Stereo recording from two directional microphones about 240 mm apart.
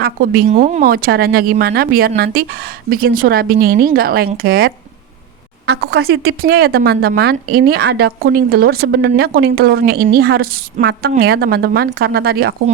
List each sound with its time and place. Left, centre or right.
0.0 s speech: right
6.1 s speech: right